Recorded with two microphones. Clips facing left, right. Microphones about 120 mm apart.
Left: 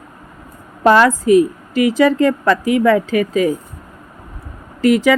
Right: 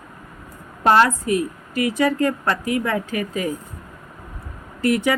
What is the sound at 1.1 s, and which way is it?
A woman's voice, 90° left.